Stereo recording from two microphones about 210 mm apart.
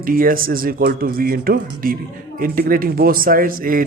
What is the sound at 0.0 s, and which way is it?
Speech, 40° right (ahead or behind).